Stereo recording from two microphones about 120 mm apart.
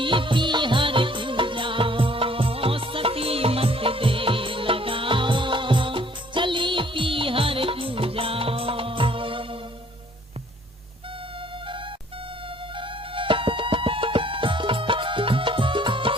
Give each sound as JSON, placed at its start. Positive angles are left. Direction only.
{"t": 0.0, "sound": "music", "side_deg": -45}
{"t": 12.7, "sound": "music", "side_deg": -45}